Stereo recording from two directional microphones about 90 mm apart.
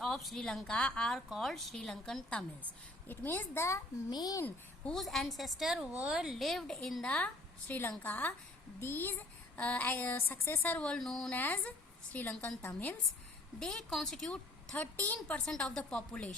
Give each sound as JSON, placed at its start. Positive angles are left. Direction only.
{"t": 0.0, "sound": "a woman's voice", "side_deg": 5}
{"t": 3.1, "sound": "a woman's voice", "side_deg": 25}
{"t": 4.1, "sound": "speech", "side_deg": 45}
{"t": 4.9, "sound": "a woman's voice", "side_deg": 0}
{"t": 11.3, "sound": "a woman's voice", "side_deg": 20}
{"t": 12.6, "sound": "a woman's voice", "side_deg": 25}
{"t": 13.6, "sound": "a woman's voice", "side_deg": 5}
{"t": 15.4, "sound": "a woman's voice", "side_deg": 10}